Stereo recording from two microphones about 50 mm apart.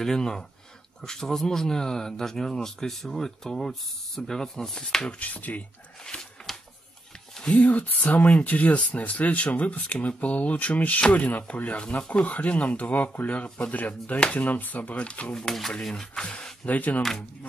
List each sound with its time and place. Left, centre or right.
0.0 s speech: centre
5.2 s speech: left
6.1 s a sound: left
7.6 s speech: left
15.0 s speech: left
15.3 s speech: centre
16.6 s speech: left